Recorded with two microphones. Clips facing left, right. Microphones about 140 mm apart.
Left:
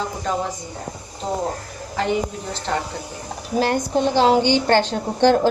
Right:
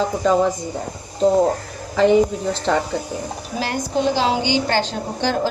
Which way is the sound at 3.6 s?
55° left (ahead or behind).